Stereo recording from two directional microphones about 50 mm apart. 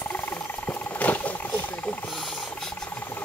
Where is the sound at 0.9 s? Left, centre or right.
Left.